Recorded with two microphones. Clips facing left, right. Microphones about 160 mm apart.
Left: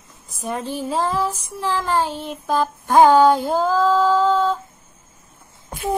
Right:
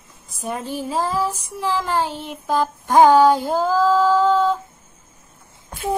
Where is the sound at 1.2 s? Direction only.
15° right (ahead or behind).